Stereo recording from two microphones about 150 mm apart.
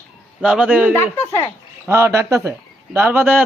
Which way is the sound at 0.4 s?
5° right (ahead or behind).